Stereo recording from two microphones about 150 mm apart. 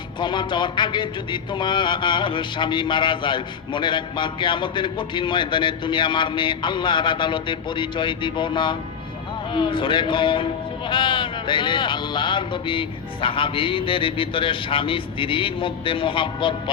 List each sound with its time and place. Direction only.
0.2 s speech: 30° left (ahead or behind)